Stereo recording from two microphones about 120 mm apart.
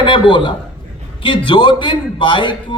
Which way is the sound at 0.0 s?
45° left (ahead or behind).